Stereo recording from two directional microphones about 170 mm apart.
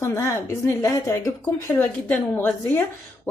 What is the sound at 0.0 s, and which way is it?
A woman's voice, 15° left (ahead or behind).